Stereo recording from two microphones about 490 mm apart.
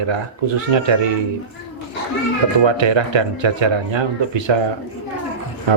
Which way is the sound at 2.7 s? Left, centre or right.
Right.